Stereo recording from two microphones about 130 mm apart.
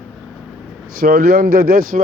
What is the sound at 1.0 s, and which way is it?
Speech, 90° right.